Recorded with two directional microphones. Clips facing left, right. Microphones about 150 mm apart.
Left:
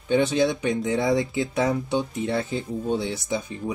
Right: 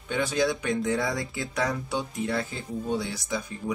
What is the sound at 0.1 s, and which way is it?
Speech, 25° left (ahead or behind).